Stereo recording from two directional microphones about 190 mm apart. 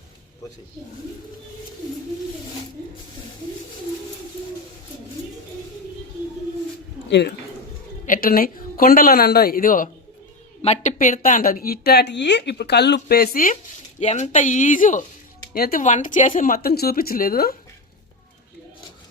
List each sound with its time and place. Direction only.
7.1 s speech: 60° left (ahead or behind)
8.0 s a woman's voice: 45° left (ahead or behind)
14.0 s a woman's voice: 35° left (ahead or behind)